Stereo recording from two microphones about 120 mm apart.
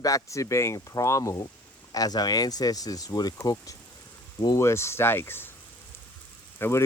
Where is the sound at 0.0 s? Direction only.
25° left (ahead or behind).